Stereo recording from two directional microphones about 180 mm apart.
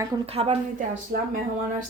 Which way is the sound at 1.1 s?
55° right (ahead or behind).